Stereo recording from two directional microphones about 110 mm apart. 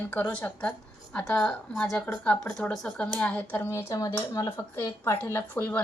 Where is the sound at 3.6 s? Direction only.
30° left (ahead or behind).